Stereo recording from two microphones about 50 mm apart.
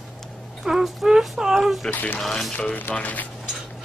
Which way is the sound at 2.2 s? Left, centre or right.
Centre.